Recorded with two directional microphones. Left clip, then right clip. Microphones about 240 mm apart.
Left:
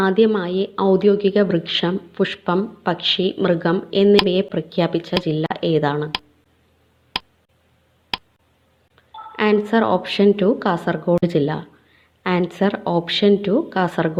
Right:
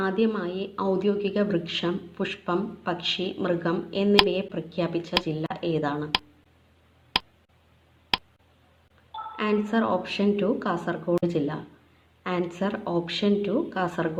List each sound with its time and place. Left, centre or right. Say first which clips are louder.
0.0 s a woman's voice: left 9 dB; left
7.1 s a sound: even; centre
8.1 s tick: even; centre
9.3 s a woman's voice: left 9 dB; left